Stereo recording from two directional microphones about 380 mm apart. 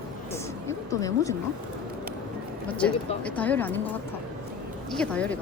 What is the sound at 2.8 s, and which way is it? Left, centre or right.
A woman's voice, centre.